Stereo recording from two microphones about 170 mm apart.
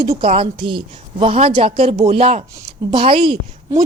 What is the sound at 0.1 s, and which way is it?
A woman's voice, 35° right (ahead or behind).